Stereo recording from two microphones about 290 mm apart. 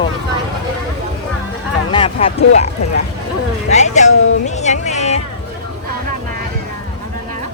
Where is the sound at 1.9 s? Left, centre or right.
Centre.